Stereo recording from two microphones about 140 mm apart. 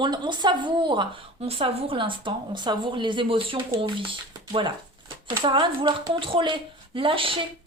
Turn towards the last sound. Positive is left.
turn(degrees=-40)  # may be behind; listen again after turning